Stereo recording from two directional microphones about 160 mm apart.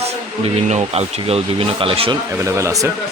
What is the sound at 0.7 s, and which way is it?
Speech, 40° right (ahead or behind).